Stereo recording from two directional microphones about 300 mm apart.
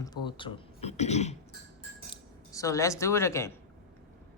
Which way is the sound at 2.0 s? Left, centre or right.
Centre.